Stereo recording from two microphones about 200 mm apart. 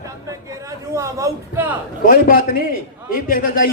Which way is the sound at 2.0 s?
45° left (ahead or behind).